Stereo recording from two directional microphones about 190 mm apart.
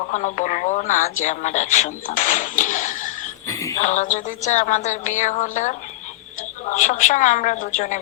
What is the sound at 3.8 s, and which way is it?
A woman's voice, 40° left (ahead or behind).